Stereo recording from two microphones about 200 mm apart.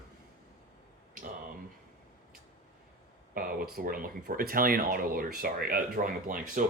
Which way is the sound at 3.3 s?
45° right (ahead or behind).